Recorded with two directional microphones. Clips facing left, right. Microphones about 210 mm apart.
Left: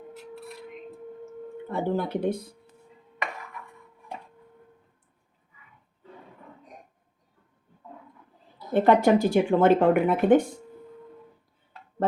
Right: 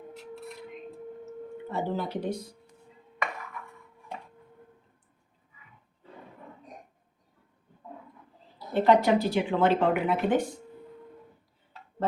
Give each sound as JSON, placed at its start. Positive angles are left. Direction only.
{"t": 1.7, "sound": "speech", "side_deg": 55}
{"t": 8.5, "sound": "speech", "side_deg": 50}